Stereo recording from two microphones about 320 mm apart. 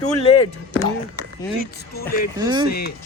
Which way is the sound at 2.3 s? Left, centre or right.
Centre.